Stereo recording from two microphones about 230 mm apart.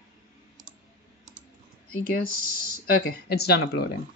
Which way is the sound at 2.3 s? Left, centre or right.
Left.